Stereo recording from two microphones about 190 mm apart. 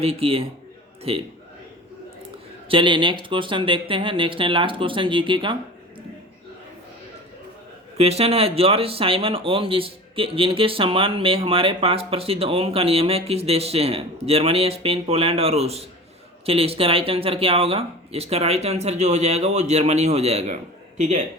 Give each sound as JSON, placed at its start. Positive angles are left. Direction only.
{"t": 0.0, "sound": "speech", "side_deg": -30}
{"t": 2.6, "sound": "speech", "side_deg": -25}
{"t": 7.9, "sound": "speech", "side_deg": -35}